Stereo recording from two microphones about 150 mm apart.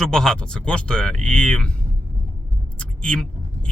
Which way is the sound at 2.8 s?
5° left (ahead or behind).